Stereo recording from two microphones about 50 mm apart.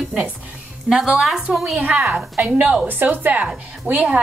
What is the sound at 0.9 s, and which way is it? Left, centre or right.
Speech, centre.